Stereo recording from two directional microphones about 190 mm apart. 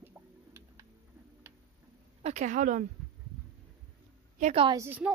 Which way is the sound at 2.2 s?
40° right (ahead or behind).